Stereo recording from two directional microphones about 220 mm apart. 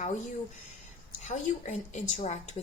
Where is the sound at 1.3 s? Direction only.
35° left (ahead or behind).